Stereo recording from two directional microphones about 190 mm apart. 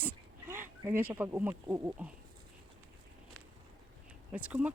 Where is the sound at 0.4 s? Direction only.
15° right (ahead or behind).